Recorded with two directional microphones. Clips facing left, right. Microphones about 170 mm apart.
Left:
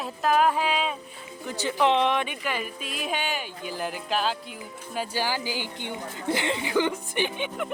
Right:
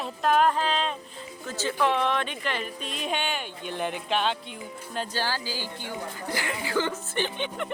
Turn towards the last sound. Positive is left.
turn(degrees=5)  # may be behind; listen again after turning